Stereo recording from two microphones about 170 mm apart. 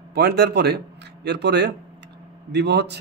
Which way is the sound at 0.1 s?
75° right (ahead or behind).